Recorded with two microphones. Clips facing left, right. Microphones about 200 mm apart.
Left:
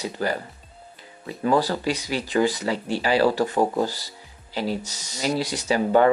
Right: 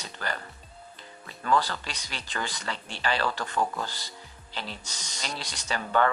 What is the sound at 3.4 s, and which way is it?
Speech, 30° left (ahead or behind).